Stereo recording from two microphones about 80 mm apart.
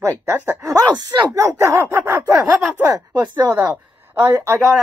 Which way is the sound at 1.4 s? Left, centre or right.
Right.